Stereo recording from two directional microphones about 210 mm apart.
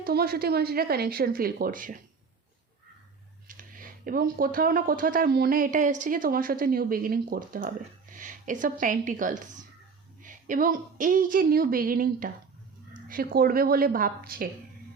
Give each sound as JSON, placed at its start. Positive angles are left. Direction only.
{"t": 0.0, "sound": "speech", "side_deg": -45}
{"t": 3.4, "sound": "a woman's voice", "side_deg": -40}